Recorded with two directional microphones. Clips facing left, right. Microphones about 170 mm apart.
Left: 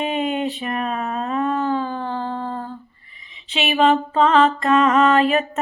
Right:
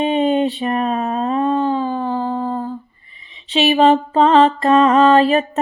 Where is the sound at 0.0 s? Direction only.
30° right (ahead or behind); by 2.7 s 15° right (ahead or behind).